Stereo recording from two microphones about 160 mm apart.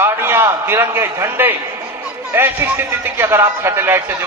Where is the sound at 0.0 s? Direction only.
15° right (ahead or behind).